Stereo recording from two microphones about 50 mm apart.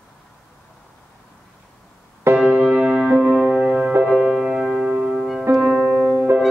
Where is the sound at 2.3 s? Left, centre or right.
Right.